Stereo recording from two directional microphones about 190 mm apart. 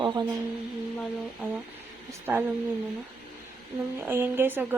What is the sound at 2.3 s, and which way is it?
Speech, 10° right (ahead or behind).